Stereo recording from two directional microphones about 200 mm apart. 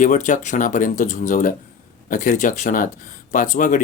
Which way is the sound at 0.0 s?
40° left (ahead or behind).